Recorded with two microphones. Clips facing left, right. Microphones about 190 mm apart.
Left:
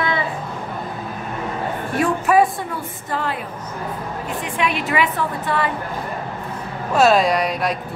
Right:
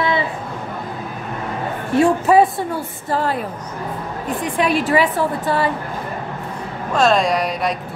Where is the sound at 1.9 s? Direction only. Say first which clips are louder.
Right 4 dB; 25° right (ahead or behind).